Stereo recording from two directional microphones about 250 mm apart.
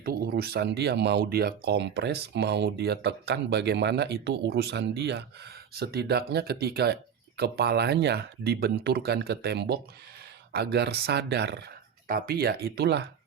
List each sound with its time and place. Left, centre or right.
0.0 s speech: right